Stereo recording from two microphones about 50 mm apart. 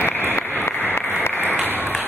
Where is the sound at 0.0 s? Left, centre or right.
Left.